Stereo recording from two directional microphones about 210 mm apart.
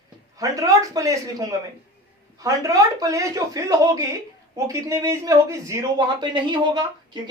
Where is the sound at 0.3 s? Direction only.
15° right (ahead or behind).